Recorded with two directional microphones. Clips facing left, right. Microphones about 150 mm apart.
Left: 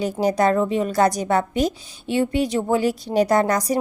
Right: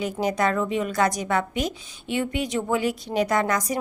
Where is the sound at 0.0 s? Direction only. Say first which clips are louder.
Left 5 dB; 35° left (ahead or behind).